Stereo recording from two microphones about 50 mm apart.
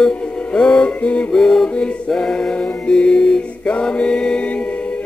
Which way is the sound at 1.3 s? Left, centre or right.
Centre.